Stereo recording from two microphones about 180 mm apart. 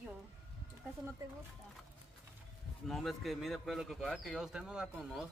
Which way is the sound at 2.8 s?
Centre (ahead or behind).